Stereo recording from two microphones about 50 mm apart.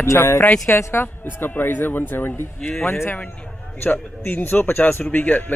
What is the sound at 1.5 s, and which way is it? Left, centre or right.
Speech, left.